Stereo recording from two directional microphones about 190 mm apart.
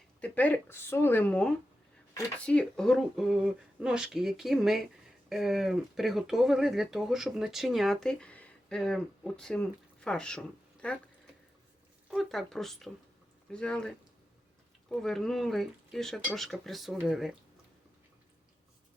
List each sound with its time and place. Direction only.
0.2 s speech: 10° left (ahead or behind)
12.1 s speech: centre (ahead or behind)